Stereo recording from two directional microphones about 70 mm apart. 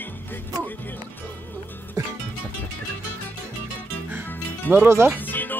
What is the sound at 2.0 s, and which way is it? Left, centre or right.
Music, right.